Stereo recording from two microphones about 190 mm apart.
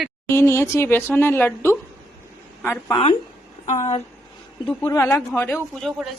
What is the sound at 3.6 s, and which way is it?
Speech, 40° left (ahead or behind).